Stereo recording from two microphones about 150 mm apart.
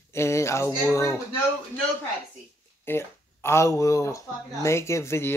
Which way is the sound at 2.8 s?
15° left (ahead or behind).